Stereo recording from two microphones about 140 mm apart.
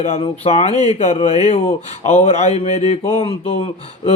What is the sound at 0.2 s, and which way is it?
Speech, 45° left (ahead or behind).